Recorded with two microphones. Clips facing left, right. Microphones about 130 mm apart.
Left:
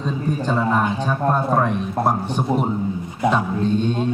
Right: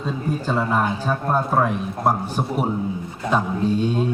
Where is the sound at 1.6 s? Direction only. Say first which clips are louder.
Left 1 dB; 5° right (ahead or behind).